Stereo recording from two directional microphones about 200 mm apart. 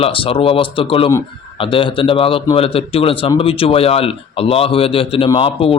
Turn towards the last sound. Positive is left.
turn(degrees=25)  # may be behind; listen again after turning